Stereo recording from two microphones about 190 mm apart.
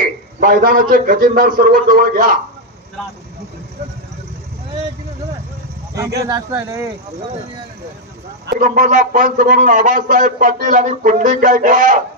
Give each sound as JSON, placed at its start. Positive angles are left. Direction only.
{"t": 0.0, "sound": "a man's voice", "side_deg": -45}
{"t": 6.2, "sound": "speech", "side_deg": -15}
{"t": 8.5, "sound": "a man's voice", "side_deg": -45}